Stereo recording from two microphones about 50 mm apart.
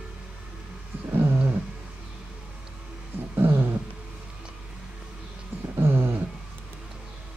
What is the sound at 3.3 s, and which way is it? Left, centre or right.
Dog, right.